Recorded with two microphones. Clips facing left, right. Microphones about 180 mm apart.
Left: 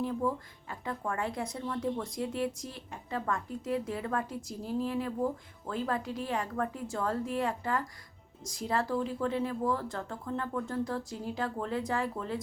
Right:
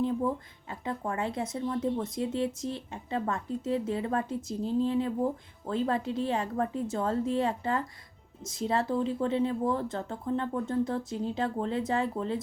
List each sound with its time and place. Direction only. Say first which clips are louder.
0.7 s a woman's voice: right 2 dB; 20° right (ahead or behind)